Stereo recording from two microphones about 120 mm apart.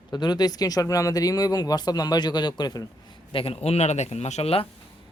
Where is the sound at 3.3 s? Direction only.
55° left (ahead or behind).